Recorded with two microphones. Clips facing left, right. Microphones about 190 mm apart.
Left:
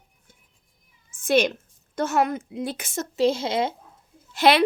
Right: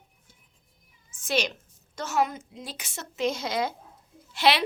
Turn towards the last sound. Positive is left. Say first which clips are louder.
# left 5 dB
turn(degrees=50)  # may be behind; listen again after turning